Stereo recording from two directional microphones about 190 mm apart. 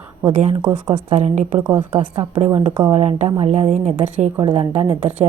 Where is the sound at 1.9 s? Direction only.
30° right (ahead or behind).